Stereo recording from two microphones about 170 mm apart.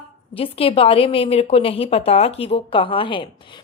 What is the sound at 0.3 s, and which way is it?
A woman's voice, 35° left (ahead or behind).